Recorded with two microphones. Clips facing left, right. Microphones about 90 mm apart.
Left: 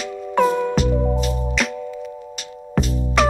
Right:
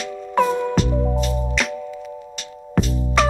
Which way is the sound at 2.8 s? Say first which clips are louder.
Even; centre (ahead or behind).